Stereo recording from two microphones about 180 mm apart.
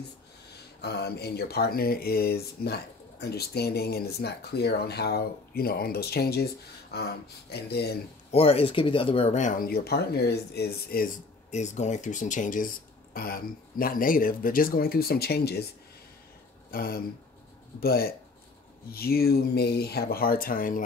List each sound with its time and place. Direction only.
0.7 s speech: 65° left (ahead or behind)
8.3 s speech: 35° left (ahead or behind); by 11.1 s 60° left (ahead or behind)
11.5 s speech: 40° left (ahead or behind); by 15.6 s 65° left (ahead or behind)
16.7 s speech: 55° left (ahead or behind)